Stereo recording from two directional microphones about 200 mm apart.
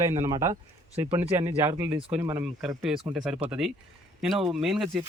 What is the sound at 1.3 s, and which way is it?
Speech, 15° right (ahead or behind).